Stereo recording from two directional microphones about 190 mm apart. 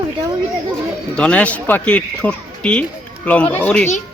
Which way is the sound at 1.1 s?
5° left (ahead or behind).